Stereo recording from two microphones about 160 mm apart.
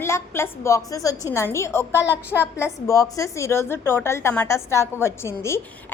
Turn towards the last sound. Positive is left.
turn(degrees=15)  # may be behind; listen again after turning